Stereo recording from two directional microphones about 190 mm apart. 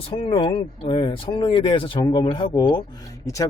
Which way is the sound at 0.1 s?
25° left (ahead or behind).